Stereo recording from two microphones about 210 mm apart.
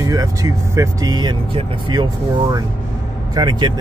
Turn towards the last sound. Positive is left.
turn(degrees=-20)  # may be behind; listen again after turning